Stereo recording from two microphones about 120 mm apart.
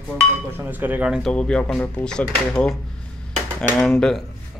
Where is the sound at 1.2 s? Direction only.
5° left (ahead or behind).